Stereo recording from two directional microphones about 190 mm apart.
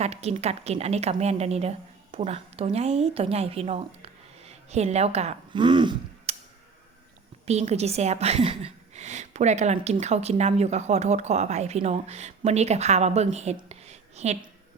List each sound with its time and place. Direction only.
0.0 s a woman's voice: 35° right (ahead or behind)
7.4 s a woman's voice: 35° right (ahead or behind)